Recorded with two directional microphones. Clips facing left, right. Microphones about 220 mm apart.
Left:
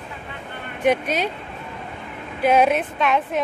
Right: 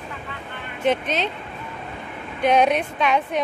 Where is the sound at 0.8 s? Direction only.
10° left (ahead or behind).